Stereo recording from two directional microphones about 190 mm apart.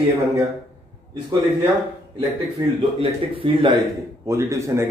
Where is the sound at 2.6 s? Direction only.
20° right (ahead or behind).